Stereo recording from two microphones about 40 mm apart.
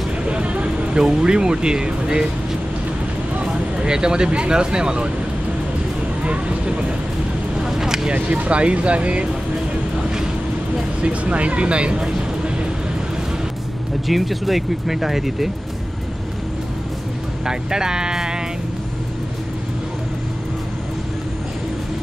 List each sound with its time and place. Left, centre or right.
0.3 s vehicle: right
1.2 s speech: right
3.7 s speech: centre
6.2 s speech: right
7.6 s vehicle: centre
8.1 s speech: right
11.0 s speech: right
14.0 s speech: centre
17.5 s speech: centre